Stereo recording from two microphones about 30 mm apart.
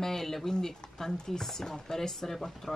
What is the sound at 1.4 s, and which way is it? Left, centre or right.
Speech, centre.